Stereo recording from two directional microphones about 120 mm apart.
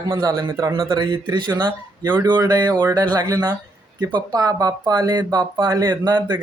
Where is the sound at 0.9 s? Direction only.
40° right (ahead or behind).